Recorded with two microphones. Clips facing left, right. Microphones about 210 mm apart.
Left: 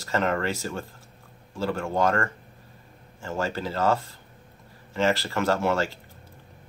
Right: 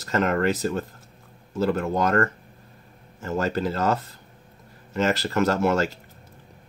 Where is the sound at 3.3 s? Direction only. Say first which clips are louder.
Right 4 dB; 45° right (ahead or behind).